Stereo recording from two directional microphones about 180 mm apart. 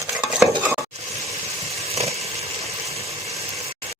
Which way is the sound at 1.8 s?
35° right (ahead or behind).